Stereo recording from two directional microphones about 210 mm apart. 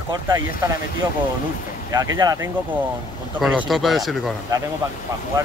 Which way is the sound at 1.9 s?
15° right (ahead or behind).